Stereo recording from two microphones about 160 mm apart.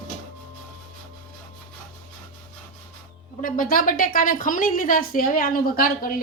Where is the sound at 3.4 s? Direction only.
60° left (ahead or behind).